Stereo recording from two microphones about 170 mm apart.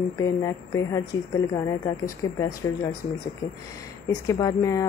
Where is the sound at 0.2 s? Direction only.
20° left (ahead or behind).